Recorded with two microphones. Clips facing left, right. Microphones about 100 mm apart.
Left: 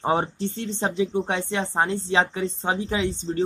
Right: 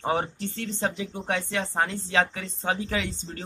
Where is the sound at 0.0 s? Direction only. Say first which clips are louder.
Left 4 dB; 25° left (ahead or behind).